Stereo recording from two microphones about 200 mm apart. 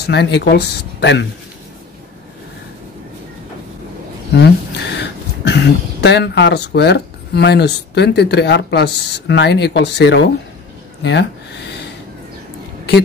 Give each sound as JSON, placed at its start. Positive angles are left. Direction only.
{"t": 0.0, "sound": "speech", "side_deg": 55}
{"t": 4.4, "sound": "speech", "side_deg": 60}